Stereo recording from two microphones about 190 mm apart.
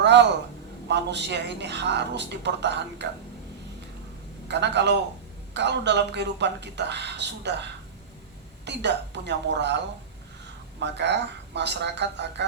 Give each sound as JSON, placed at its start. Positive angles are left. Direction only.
{"t": 0.0, "sound": "a man's voice", "side_deg": -65}
{"t": 4.4, "sound": "speech", "side_deg": -65}
{"t": 8.6, "sound": "speech", "side_deg": -65}